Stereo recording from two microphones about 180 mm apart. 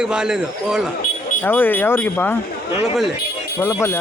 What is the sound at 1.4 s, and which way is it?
Speech, 10° left (ahead or behind).